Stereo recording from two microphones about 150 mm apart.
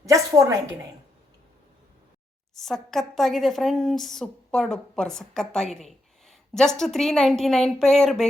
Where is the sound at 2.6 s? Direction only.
Centre (ahead or behind).